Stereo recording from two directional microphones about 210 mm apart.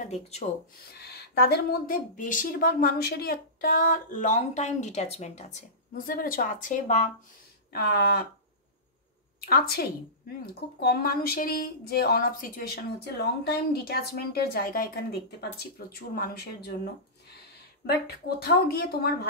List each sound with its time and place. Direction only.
0.0 s speech: 30° left (ahead or behind)
0.9 s speech: 50° left (ahead or behind); by 5.6 s 30° left (ahead or behind)
6.0 s speech: 40° left (ahead or behind)
7.7 s speech: 50° left (ahead or behind)
9.5 s speech: 45° left (ahead or behind)
18.4 s speech: 45° left (ahead or behind)